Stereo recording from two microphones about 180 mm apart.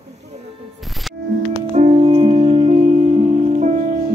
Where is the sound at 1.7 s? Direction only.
35° right (ahead or behind).